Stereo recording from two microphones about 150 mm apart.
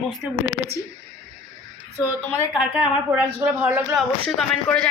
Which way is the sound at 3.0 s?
10° right (ahead or behind).